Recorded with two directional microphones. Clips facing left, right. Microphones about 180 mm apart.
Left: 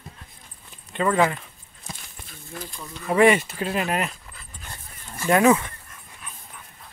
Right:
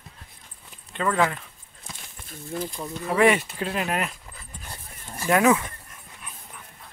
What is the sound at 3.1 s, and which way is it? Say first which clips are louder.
Speech: left 3 dB; centre (ahead or behind).